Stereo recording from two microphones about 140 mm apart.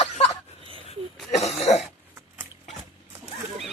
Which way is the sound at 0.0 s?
45° left (ahead or behind).